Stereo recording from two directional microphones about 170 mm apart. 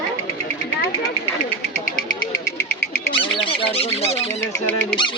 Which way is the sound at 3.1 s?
30° left (ahead or behind).